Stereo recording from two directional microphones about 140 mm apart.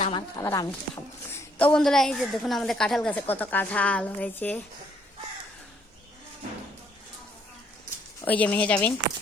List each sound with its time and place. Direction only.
0.1 s a woman's voice: 30° left (ahead or behind)
1.5 s a woman's voice: 5° left (ahead or behind)
8.2 s a woman's voice: 10° left (ahead or behind)